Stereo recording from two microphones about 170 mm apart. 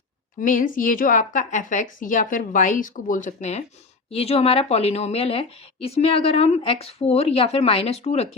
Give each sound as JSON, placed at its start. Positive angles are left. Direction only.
{"t": 0.3, "sound": "speech", "side_deg": 50}